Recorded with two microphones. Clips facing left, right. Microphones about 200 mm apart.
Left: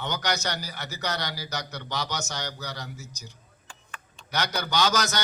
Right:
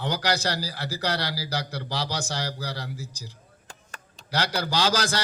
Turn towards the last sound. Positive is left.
turn(degrees=-30)  # may be behind; listen again after turning